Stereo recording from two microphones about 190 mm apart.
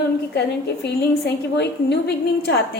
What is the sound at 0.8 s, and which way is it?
A woman's voice, 60° left (ahead or behind).